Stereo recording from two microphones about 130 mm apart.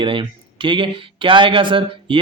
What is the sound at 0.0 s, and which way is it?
Speech, 40° right (ahead or behind).